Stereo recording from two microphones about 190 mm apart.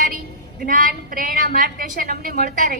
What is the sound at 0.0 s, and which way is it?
A woman's voice, 45° right (ahead or behind).